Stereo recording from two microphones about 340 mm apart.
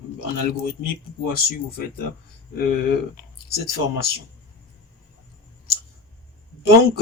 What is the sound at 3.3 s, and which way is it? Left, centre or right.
Speech, left.